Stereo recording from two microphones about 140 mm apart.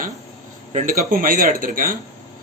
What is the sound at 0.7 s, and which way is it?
Speech, 75° right (ahead or behind).